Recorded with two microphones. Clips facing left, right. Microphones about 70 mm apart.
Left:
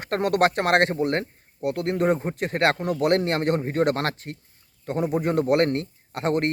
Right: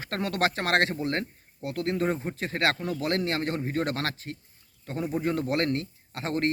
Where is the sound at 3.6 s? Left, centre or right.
Left.